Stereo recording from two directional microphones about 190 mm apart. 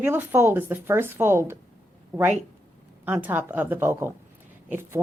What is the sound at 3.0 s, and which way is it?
Speech, 10° right (ahead or behind).